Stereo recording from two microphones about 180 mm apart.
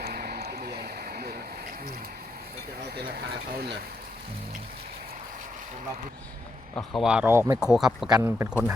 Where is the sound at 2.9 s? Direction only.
60° right (ahead or behind).